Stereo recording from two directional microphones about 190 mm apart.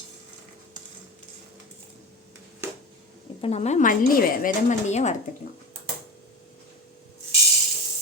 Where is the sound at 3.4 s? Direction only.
35° left (ahead or behind).